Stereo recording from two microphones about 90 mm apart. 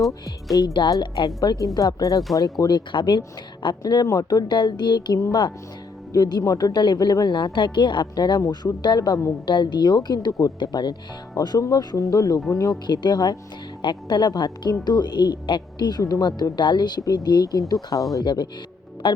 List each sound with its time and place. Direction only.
0.5 s a woman's voice: 55° left (ahead or behind)
1.0 s speech: 60° left (ahead or behind)
1.4 s a woman's voice: 40° left (ahead or behind)
6.1 s a woman's voice: 55° left (ahead or behind)
6.4 s a woman's voice: 45° left (ahead or behind)
12.9 s a woman's voice: 55° left (ahead or behind)
19.0 s speech: 65° left (ahead or behind)